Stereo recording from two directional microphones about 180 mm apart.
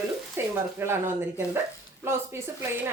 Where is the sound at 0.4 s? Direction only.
15° right (ahead or behind).